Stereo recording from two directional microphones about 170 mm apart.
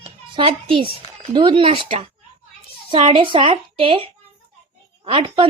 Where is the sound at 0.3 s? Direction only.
30° right (ahead or behind).